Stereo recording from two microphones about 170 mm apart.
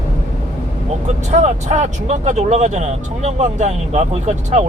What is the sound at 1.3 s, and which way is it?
Speech, 40° right (ahead or behind).